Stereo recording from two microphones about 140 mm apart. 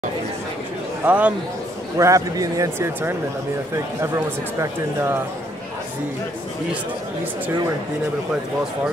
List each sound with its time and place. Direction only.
1.0 s speech: 10° right (ahead or behind)
2.0 s speech: 25° right (ahead or behind)